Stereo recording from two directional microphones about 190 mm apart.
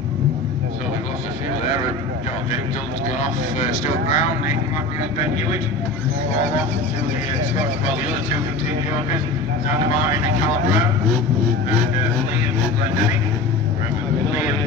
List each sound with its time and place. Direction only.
3.2 s speech: 40° left (ahead or behind)